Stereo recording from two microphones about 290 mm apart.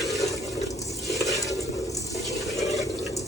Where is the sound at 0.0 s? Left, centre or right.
Centre.